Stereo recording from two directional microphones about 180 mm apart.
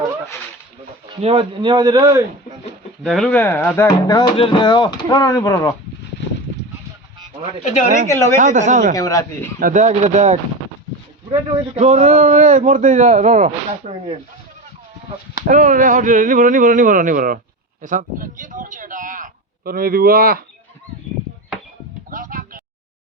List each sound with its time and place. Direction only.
1.2 s speech: 30° right (ahead or behind)
3.0 s speech: centre (ahead or behind); by 5.7 s 15° left (ahead or behind)
8.0 s speech: 15° left (ahead or behind)
8.4 s speech: 45° right (ahead or behind)
9.0 s speech: 20° left (ahead or behind)
9.6 s a man's voice: 45° right (ahead or behind)
15.4 s speech: 45° right (ahead or behind)
22.1 s a sound: 50° right (ahead or behind)